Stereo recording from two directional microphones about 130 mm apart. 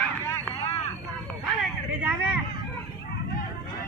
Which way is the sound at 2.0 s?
10° right (ahead or behind).